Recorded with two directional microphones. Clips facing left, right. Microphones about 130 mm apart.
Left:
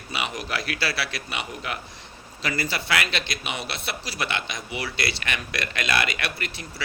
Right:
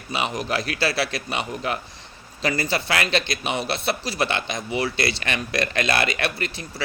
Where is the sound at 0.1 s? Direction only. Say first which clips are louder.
Right 5 dB; 30° right (ahead or behind).